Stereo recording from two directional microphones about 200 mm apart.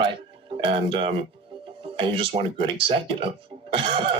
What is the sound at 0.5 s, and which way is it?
Speech, 25° right (ahead or behind).